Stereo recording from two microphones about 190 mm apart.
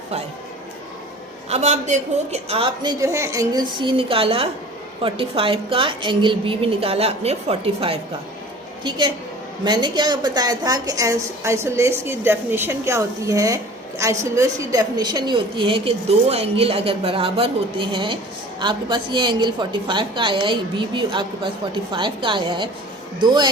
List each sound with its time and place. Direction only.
1.5 s a woman's voice: 35° right (ahead or behind)
3.0 s a woman's voice: 15° right (ahead or behind)